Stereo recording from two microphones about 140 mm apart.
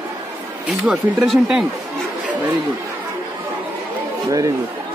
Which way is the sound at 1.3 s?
5° right (ahead or behind).